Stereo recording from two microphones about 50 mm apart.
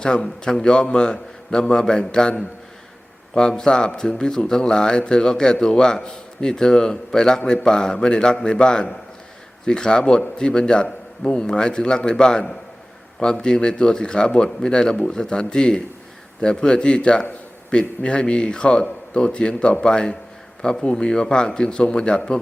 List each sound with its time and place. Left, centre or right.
0.0 s speech: centre
3.3 s a man's voice: centre